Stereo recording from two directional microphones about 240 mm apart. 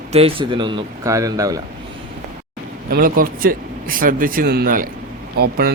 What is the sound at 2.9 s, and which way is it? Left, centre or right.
Speech, right.